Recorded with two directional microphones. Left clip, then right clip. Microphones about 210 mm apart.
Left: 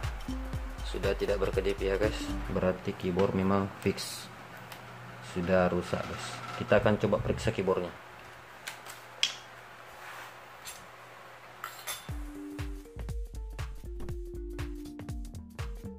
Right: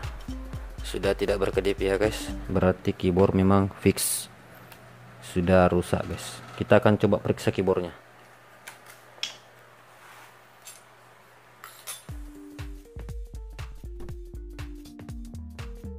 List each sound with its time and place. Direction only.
0.0 s music: centre (ahead or behind)
0.8 s speech: 35° right (ahead or behind)
5.2 s speech: 40° right (ahead or behind)
14.6 s music: centre (ahead or behind)